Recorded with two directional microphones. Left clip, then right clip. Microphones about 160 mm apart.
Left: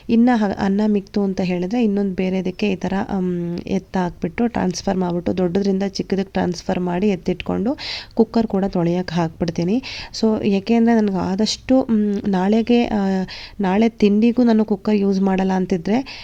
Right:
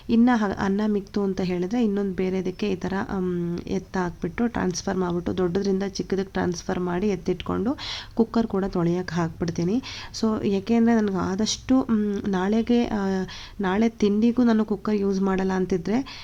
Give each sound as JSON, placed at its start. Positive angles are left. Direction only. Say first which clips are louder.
{"t": 0.1, "sound": "a woman's voice", "louder": "left 4 dB", "side_deg": 25}